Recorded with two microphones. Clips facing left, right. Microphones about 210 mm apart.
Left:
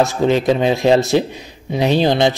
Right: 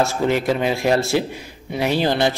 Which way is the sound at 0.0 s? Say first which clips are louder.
Left 4 dB; 20° left (ahead or behind).